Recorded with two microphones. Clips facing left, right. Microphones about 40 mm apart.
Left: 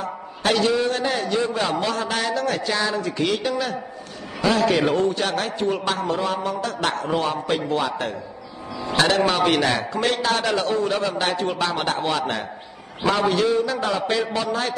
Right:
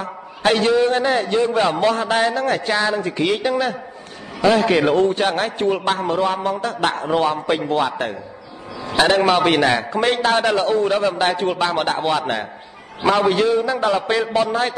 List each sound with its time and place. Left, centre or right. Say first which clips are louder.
0.0 s a man's voice: right 4 dB; right